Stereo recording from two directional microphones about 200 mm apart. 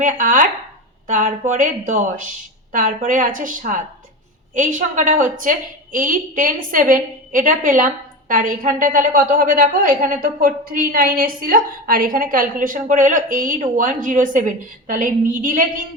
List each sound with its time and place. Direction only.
0.0 s a woman's voice: 40° right (ahead or behind)